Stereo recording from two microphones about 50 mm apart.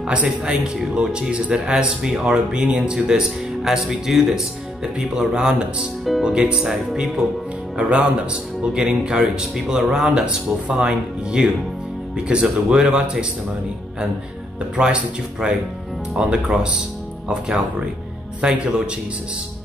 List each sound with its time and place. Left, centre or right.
0.0 s a man's voice: centre
7.7 s a man's voice: centre
14.8 s speech: right
18.4 s a man's voice: centre